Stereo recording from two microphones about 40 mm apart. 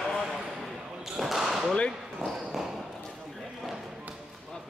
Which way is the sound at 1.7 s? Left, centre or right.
Left.